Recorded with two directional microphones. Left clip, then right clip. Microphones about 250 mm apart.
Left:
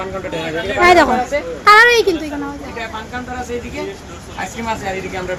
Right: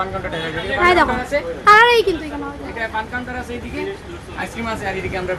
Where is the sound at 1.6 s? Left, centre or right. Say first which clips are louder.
Left 2 dB; centre.